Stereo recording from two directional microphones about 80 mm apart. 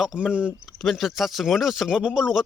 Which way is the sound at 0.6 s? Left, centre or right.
Centre.